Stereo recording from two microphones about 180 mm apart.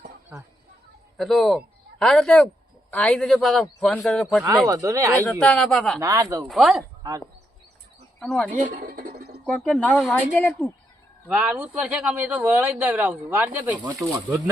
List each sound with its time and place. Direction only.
1.1 s a man's voice: centre (ahead or behind)
4.6 s speech: 15° right (ahead or behind)
5.3 s a man's voice: centre (ahead or behind)
6.0 s speech: 20° right (ahead or behind)
6.4 s a man's voice: centre (ahead or behind)
8.2 s a man's voice: centre (ahead or behind)
8.5 s bird: 45° right (ahead or behind)
9.5 s a man's voice: 5° left (ahead or behind)
11.3 s speech: 5° right (ahead or behind)